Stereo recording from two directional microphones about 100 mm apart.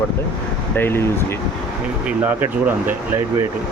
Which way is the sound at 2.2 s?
20° right (ahead or behind).